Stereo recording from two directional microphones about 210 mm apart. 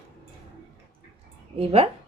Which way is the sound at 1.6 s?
25° right (ahead or behind).